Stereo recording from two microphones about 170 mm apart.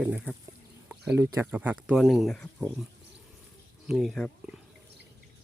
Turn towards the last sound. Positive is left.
turn(degrees=0)  # may be behind; listen again after turning